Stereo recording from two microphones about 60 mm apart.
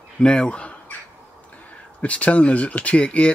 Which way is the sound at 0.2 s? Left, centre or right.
Centre.